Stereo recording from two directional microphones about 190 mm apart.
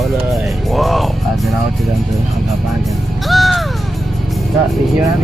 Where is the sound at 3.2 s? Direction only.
Centre (ahead or behind).